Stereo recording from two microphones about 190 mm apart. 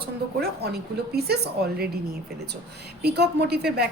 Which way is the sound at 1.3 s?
55° right (ahead or behind).